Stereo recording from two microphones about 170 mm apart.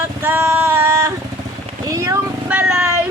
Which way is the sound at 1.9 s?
20° right (ahead or behind).